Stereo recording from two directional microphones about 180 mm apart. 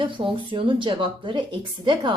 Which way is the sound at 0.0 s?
25° right (ahead or behind).